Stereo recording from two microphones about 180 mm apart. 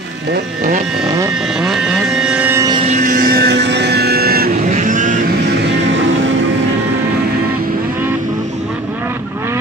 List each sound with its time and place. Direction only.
1.0 s vehicle: 20° right (ahead or behind)
1.6 s vehicle: 5° right (ahead or behind)
2.6 s vehicle: 25° right (ahead or behind)
2.9 s vehicle: 45° right (ahead or behind)
5.9 s music: 90° right